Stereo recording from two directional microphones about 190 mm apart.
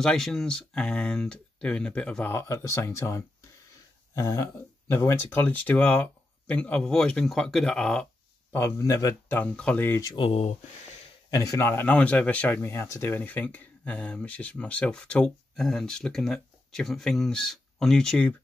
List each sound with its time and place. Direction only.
0.0 s speech: 5° left (ahead or behind)
10.1 s speech: 30° left (ahead or behind)
11.2 s speech: 20° left (ahead or behind)